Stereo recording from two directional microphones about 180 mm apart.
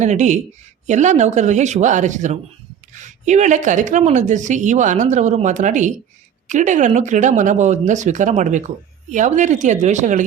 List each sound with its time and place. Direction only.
0.0 s a woman's voice: 40° right (ahead or behind)